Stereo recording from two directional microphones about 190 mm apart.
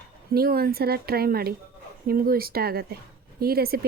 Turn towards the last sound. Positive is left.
turn(degrees=-55)  # may be behind; listen again after turning